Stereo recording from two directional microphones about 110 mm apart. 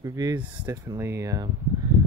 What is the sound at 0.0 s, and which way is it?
Speech, 30° right (ahead or behind).